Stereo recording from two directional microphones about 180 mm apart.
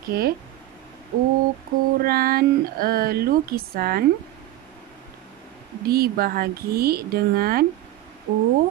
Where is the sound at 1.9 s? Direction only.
55° right (ahead or behind).